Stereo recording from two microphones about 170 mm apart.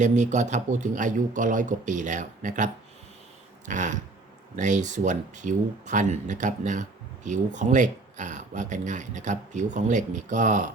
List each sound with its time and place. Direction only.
0.0 s speech: 45° right (ahead or behind)
3.7 s speech: 45° right (ahead or behind)